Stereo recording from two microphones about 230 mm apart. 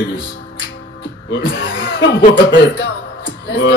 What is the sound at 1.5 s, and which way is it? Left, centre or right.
Music, left.